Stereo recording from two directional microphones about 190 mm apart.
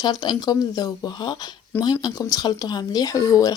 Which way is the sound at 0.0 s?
20° left (ahead or behind).